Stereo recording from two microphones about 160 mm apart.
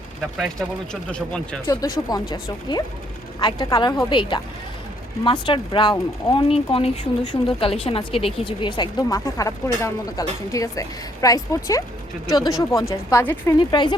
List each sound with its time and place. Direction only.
0.2 s speech: centre (ahead or behind)
1.6 s speech: 20° left (ahead or behind)
13.6 s speech: 30° left (ahead or behind)